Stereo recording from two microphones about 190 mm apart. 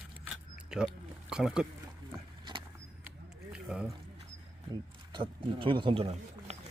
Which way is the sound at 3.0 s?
5° right (ahead or behind).